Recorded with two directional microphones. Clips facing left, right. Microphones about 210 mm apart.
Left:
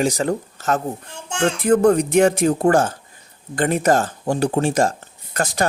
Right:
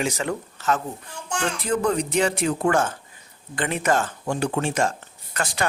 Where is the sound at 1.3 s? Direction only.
25° left (ahead or behind).